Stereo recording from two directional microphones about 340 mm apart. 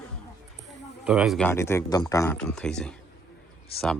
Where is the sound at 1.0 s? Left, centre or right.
Centre.